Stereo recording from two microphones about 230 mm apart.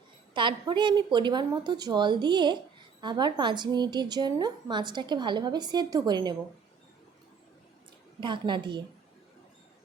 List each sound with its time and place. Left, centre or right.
0.3 s a woman's voice: right
8.2 s a woman's voice: right